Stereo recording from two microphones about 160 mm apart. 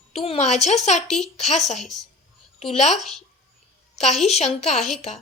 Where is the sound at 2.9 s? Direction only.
Centre (ahead or behind).